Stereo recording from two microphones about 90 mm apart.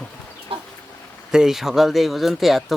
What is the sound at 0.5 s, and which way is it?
Chicken, 80° right.